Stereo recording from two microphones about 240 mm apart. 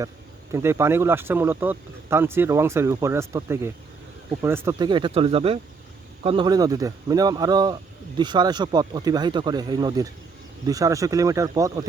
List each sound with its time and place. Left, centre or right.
0.5 s speech: centre